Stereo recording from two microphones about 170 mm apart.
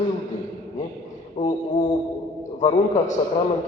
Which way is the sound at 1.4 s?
40° left (ahead or behind).